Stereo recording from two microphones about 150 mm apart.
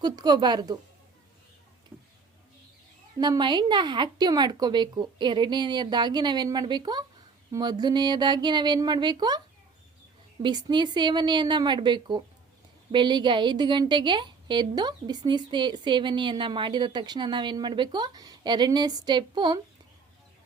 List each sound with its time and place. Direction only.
0.0 s a woman's voice: 25° right (ahead or behind)
1.9 s a sound: 10° right (ahead or behind)
3.2 s a woman's voice: 30° right (ahead or behind)
10.4 s a woman's voice: 30° right (ahead or behind)